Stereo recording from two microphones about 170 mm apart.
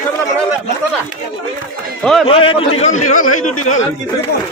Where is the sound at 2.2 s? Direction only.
35° left (ahead or behind).